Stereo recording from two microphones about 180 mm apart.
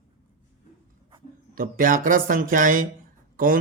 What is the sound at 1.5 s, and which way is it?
Speech, 50° right (ahead or behind).